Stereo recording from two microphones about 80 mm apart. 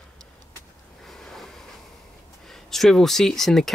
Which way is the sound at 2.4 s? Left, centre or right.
Centre.